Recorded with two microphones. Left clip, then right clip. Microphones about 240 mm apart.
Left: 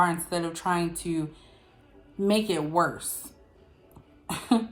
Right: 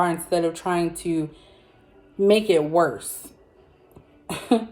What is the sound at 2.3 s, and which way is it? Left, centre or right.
Speech, centre.